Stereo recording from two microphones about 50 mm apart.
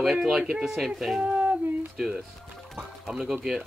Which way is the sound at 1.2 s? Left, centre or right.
Right.